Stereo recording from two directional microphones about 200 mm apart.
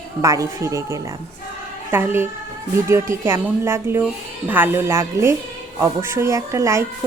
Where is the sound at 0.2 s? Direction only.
15° right (ahead or behind).